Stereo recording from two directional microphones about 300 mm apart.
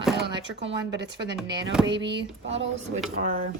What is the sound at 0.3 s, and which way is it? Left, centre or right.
A woman's voice, right.